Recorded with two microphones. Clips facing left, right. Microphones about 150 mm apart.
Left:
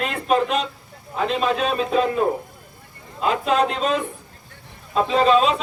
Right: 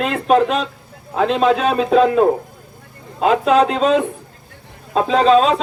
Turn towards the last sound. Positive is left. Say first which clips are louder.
# right 4 dB
turn(degrees=-40)  # may be behind; listen again after turning